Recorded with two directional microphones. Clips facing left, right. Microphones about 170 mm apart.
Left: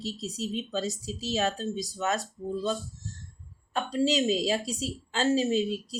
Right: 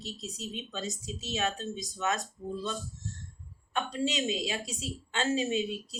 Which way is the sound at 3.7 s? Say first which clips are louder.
Left 5 dB; 35° left (ahead or behind).